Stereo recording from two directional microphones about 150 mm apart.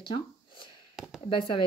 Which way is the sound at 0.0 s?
35° left (ahead or behind).